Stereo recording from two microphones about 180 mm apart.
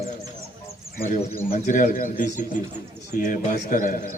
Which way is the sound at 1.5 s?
45° left (ahead or behind).